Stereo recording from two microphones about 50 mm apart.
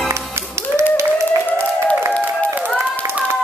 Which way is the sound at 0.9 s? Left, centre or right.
Right.